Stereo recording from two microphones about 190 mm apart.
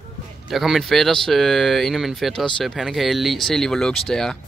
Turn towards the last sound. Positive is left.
turn(degrees=0)  # may be behind; listen again after turning